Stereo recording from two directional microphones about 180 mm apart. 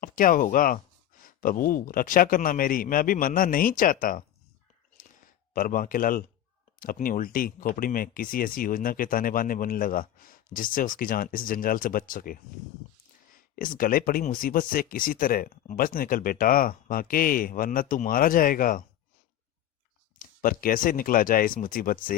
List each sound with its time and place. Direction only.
0.0 s speech: 50° left (ahead or behind)
5.0 s a sound: 50° left (ahead or behind)
5.5 s speech: 50° left (ahead or behind)
20.1 s speech: 50° left (ahead or behind)